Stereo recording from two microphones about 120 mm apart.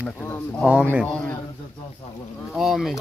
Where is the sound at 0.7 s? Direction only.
10° right (ahead or behind).